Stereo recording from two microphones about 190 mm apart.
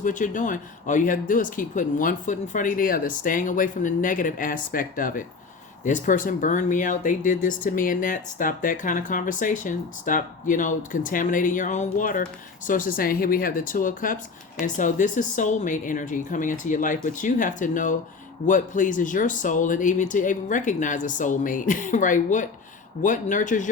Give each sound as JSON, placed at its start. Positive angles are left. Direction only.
{"t": 0.0, "sound": "speech", "side_deg": 40}